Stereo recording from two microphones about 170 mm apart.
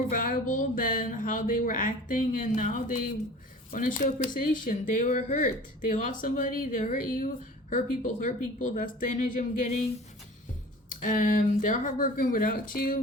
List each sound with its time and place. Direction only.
0.1 s speech: 55° left (ahead or behind)
11.0 s speech: 50° left (ahead or behind)